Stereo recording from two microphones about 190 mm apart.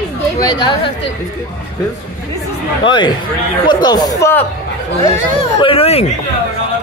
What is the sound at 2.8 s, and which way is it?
Speech, 25° left (ahead or behind).